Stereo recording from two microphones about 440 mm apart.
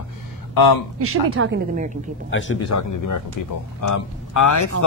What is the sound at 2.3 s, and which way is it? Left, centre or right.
Speech, left.